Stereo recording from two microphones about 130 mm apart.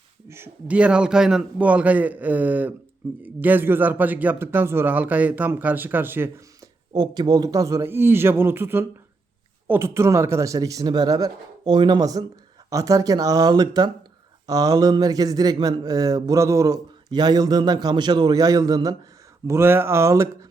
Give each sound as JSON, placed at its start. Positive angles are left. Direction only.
{"t": 0.3, "sound": "speech", "side_deg": -20}
{"t": 6.9, "sound": "speech", "side_deg": -30}
{"t": 19.5, "sound": "speech", "side_deg": -20}